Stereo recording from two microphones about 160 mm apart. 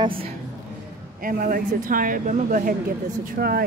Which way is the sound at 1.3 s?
60° right (ahead or behind).